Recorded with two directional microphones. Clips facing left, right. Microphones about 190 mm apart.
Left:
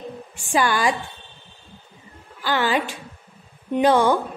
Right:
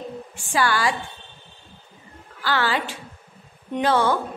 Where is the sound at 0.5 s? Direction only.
15° left (ahead or behind).